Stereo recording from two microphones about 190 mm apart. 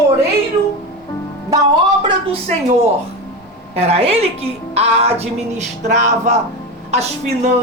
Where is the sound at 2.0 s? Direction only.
25° right (ahead or behind).